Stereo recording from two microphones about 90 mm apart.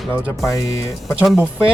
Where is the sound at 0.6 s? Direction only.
40° left (ahead or behind).